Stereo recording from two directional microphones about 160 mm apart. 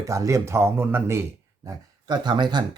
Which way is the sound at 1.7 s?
25° right (ahead or behind).